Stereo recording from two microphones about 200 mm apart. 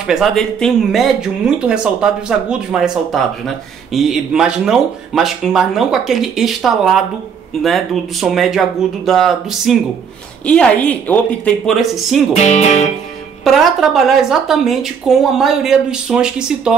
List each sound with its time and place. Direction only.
0.0 s speech: centre (ahead or behind)
12.4 s speech: 35° left (ahead or behind)
13.4 s speech: centre (ahead or behind)